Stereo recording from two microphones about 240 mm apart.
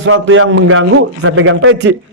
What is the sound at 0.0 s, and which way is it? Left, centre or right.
A man's voice, right.